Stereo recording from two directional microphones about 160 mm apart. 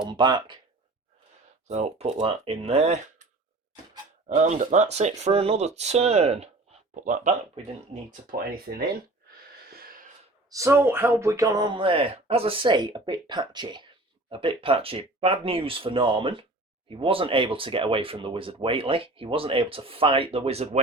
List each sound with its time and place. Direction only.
0.0 s speech: 25° right (ahead or behind)
1.6 s speech: 45° right (ahead or behind)
4.4 s speech: 45° right (ahead or behind)
8.1 s speech: 65° right (ahead or behind)
9.6 s a sound: 70° right (ahead or behind)
10.5 s speech: 20° right (ahead or behind); by 20.7 s 40° right (ahead or behind)